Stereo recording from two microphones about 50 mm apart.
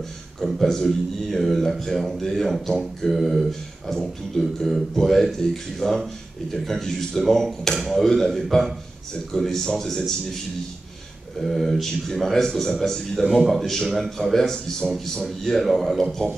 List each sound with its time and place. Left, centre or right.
0.6 s speech: centre
3.1 s speech: centre
11.4 s speech: centre